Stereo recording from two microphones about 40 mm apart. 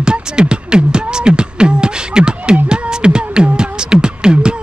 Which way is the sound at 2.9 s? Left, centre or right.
Right.